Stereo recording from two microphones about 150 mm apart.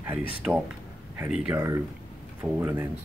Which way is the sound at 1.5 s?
20° right (ahead or behind).